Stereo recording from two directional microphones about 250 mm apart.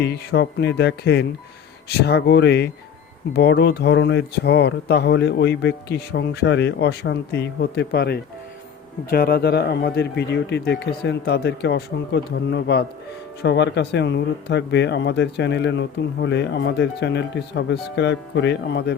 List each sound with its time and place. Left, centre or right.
0.0 s speech: left